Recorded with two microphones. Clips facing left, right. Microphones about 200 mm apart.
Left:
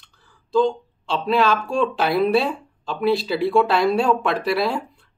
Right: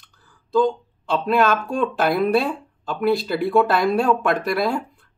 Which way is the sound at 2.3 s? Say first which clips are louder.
Even; centre (ahead or behind).